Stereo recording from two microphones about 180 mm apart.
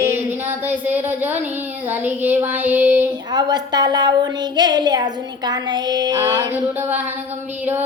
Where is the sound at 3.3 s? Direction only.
25° right (ahead or behind).